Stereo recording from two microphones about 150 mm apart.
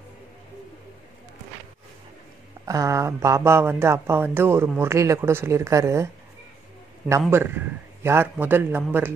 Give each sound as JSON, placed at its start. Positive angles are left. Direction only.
{"t": 2.6, "sound": "a woman's voice", "side_deg": -20}
{"t": 7.1, "sound": "speech", "side_deg": -15}